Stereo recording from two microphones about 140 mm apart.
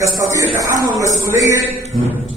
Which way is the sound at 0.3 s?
25° right (ahead or behind).